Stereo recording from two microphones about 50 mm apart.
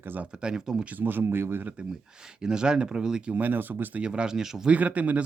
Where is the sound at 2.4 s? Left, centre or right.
Centre.